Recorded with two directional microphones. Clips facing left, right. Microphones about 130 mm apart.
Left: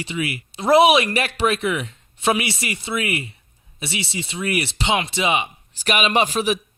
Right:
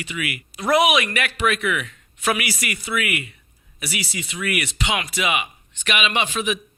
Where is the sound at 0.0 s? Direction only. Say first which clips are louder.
Left 3 dB; 30° left (ahead or behind).